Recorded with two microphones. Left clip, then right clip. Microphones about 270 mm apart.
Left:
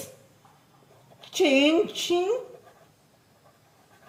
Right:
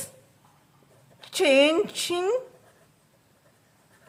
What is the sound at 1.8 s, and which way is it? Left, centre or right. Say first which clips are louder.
Speech: left 1 dB; right.